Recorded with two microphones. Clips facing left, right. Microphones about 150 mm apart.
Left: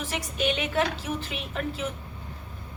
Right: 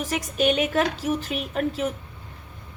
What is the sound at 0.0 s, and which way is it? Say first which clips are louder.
A woman's voice: right 5 dB; 40° right (ahead or behind).